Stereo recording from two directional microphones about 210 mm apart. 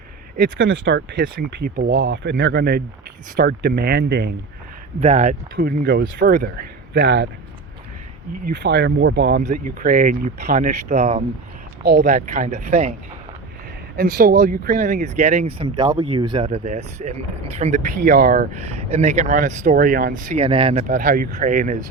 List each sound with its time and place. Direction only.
0.6 s speech: 65° right (ahead or behind); by 1.9 s 45° right (ahead or behind)
2.0 s speech: 60° right (ahead or behind); by 4.4 s 45° right (ahead or behind)
4.9 s speech: 30° right (ahead or behind)
6.0 s speech: 60° right (ahead or behind)
6.3 s speech: 45° right (ahead or behind)
8.4 s speech: 55° right (ahead or behind)
9.5 s speech: 40° right (ahead or behind)
13.9 s speech: 45° right (ahead or behind)